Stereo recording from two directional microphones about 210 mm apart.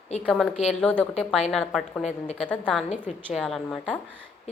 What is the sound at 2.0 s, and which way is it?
Speech, 30° left (ahead or behind).